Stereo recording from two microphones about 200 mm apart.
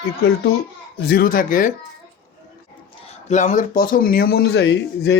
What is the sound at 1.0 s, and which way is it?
Speech, 50° left (ahead or behind).